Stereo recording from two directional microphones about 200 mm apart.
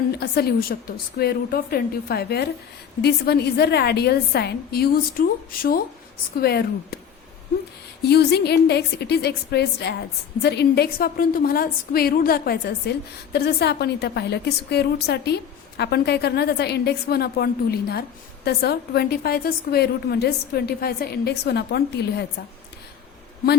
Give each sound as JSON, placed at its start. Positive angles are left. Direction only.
{"t": 0.1, "sound": "a woman's voice", "side_deg": 50}
{"t": 8.0, "sound": "a woman's voice", "side_deg": 55}